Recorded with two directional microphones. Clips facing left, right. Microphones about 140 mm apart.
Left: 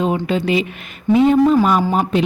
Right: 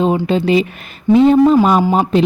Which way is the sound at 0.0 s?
30° right (ahead or behind).